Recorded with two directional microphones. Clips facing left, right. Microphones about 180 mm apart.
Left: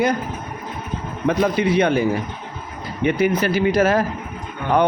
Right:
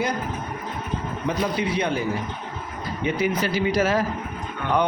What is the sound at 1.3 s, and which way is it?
Speech, 60° left (ahead or behind).